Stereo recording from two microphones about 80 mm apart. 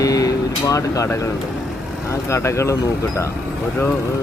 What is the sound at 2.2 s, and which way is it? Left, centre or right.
Speech, left.